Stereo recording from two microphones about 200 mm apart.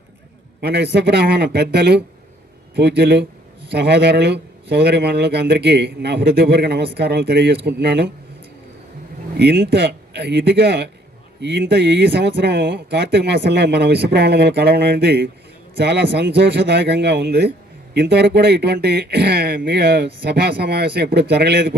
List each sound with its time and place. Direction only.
0.6 s speech: 55° right (ahead or behind)
9.4 s a man's voice: 55° right (ahead or behind)